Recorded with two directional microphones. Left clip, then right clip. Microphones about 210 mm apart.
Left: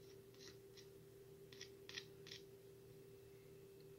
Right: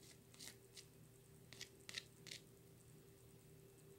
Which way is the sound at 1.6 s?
25° right (ahead or behind).